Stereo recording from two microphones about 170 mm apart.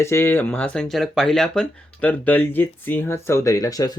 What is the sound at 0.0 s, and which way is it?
Speech, 15° left (ahead or behind).